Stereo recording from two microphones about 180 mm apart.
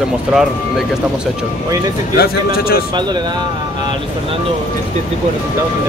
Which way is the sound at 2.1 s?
55° left (ahead or behind).